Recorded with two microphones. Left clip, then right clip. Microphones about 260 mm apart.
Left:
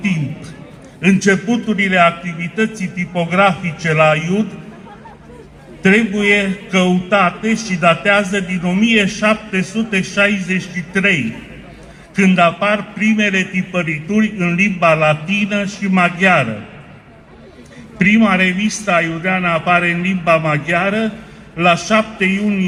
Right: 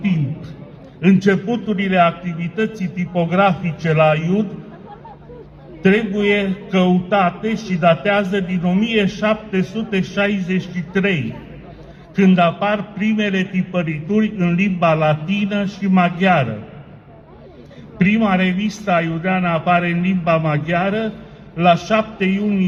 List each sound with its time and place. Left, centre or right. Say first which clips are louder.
1.0 s a man's voice: left 2 dB; right
5.8 s a man's voice: left 3 dB; right
17.9 s a man's voice: left 4 dB; right